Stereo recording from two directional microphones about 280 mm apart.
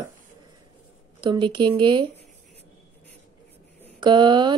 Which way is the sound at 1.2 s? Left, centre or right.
Centre.